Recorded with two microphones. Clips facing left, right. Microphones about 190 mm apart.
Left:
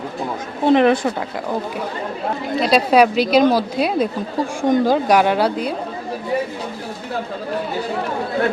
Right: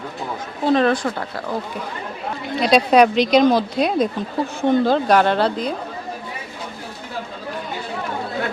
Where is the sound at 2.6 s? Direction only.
Centre (ahead or behind).